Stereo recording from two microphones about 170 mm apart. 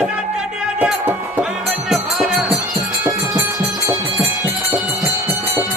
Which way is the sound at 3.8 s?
15° right (ahead or behind).